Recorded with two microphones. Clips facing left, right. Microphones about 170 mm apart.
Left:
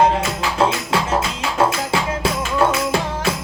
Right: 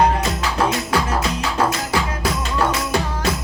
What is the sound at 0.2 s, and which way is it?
Music, 25° left (ahead or behind).